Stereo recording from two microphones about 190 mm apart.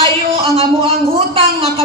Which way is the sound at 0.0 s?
30° right (ahead or behind).